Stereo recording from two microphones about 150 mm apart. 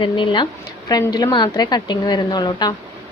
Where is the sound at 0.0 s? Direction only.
35° left (ahead or behind).